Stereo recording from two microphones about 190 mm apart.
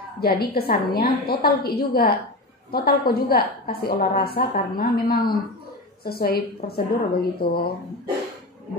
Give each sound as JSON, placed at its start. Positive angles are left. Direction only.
{"t": 0.2, "sound": "a woman's voice", "side_deg": 55}